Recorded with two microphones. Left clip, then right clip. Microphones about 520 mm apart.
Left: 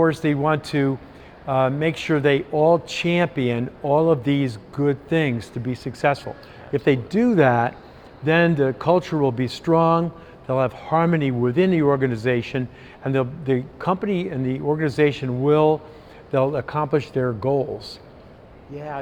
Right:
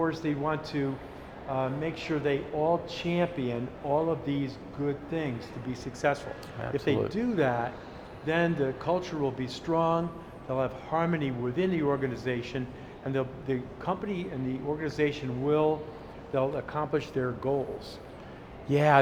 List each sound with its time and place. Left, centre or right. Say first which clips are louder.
0.0 s speech: left 10 dB; left
5.7 s speech: left 7 dB; left
18.7 s a man's voice: right 9 dB; right